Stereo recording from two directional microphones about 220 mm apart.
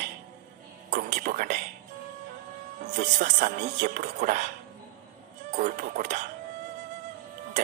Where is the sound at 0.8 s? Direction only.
35° right (ahead or behind).